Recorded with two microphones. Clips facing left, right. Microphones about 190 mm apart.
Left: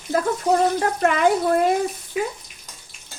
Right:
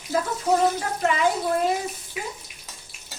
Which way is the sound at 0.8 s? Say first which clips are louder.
Left 4 dB; 60° left (ahead or behind).